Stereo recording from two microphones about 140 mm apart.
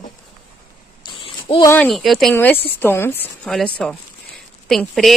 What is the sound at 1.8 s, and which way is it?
Speech, centre (ahead or behind).